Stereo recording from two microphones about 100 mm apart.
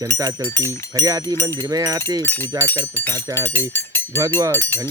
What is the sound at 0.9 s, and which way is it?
Speech, 40° right (ahead or behind).